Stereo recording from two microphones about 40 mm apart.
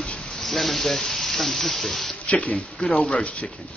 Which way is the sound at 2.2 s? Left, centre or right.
Left.